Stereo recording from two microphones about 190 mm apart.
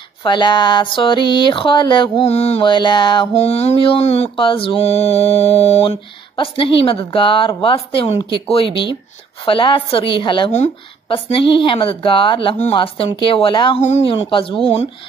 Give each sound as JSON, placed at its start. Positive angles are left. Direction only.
{"t": 0.2, "sound": "speech", "side_deg": 25}